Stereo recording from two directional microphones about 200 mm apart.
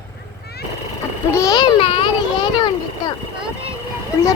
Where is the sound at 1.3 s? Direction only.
15° left (ahead or behind).